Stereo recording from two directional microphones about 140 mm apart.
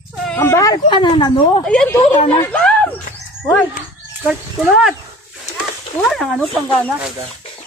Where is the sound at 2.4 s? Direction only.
10° left (ahead or behind).